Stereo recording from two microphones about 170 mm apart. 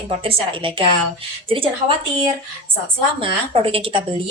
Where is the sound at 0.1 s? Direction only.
30° right (ahead or behind).